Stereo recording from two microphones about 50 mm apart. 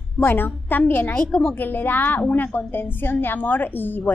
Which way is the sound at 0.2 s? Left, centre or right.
Left.